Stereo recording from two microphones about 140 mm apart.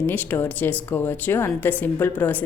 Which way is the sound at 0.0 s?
10° left (ahead or behind).